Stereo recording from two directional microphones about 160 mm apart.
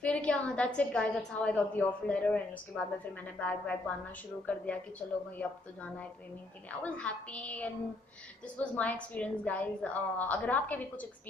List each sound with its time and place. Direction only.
0.0 s a woman's voice: 5° left (ahead or behind)